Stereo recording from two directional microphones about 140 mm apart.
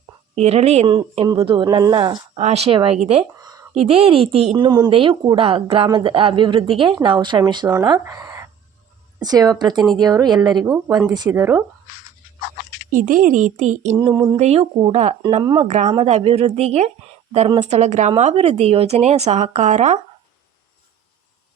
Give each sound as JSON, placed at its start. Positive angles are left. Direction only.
{"t": 0.3, "sound": "a woman's voice", "side_deg": -50}
{"t": 3.4, "sound": "a sound", "side_deg": -25}
{"t": 3.8, "sound": "speech", "side_deg": -45}
{"t": 4.5, "sound": "a woman's voice", "side_deg": -30}
{"t": 12.9, "sound": "speech", "side_deg": -70}
{"t": 14.1, "sound": "speech", "side_deg": -30}
{"t": 14.3, "sound": "speech", "side_deg": -50}
{"t": 15.4, "sound": "speech", "side_deg": -30}
{"t": 15.6, "sound": "speech", "side_deg": -60}
{"t": 16.0, "sound": "speech", "side_deg": -50}